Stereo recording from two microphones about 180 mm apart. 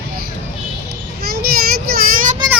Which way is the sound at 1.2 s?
60° right (ahead or behind).